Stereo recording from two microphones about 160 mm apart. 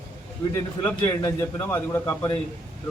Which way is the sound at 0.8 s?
15° left (ahead or behind).